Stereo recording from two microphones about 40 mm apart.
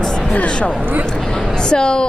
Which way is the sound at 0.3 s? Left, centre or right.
Left.